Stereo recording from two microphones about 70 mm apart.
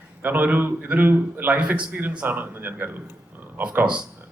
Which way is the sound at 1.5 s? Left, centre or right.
Centre.